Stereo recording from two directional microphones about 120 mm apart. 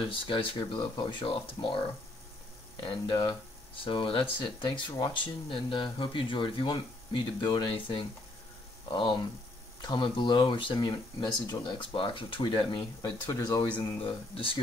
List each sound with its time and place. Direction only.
0.0 s speech: 45° left (ahead or behind)
2.8 s speech: 40° left (ahead or behind)
13.0 s speech: 35° left (ahead or behind)
13.7 s speech: 45° left (ahead or behind)